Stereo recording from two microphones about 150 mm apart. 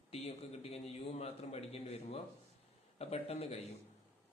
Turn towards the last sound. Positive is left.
turn(degrees=45)  # may be behind; listen again after turning